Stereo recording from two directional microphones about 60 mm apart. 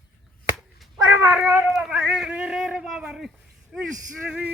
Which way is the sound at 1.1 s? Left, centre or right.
Right.